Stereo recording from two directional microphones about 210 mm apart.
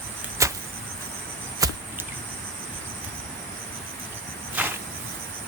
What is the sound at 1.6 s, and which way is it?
Chop, 15° right (ahead or behind).